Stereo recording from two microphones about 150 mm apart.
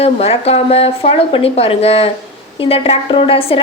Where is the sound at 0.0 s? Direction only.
40° left (ahead or behind).